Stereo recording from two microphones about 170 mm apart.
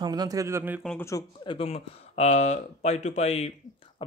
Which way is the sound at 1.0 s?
15° left (ahead or behind).